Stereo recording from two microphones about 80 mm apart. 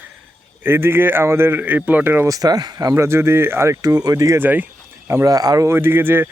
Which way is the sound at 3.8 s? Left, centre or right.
Right.